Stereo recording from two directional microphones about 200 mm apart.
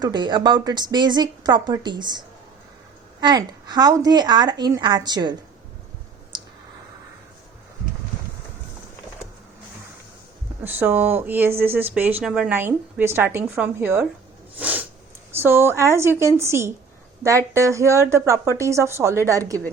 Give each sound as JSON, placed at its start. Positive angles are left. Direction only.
{"t": 0.0, "sound": "speech", "side_deg": -20}
{"t": 10.6, "sound": "speech", "side_deg": -10}
{"t": 14.6, "sound": "snort", "side_deg": -10}
{"t": 15.3, "sound": "speech", "side_deg": -10}